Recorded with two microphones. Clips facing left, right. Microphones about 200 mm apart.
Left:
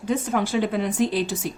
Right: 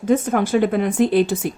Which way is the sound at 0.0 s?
50° right (ahead or behind).